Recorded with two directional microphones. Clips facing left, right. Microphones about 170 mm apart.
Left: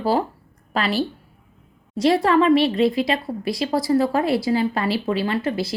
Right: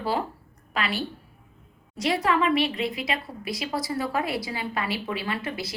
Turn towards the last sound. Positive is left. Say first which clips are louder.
# left 8 dB
turn(degrees=30)  # may be behind; listen again after turning